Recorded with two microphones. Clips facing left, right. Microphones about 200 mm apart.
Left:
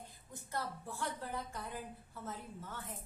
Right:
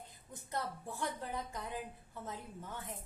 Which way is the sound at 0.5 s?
20° right (ahead or behind).